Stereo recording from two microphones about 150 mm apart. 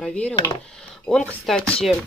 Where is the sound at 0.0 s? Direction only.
10° left (ahead or behind).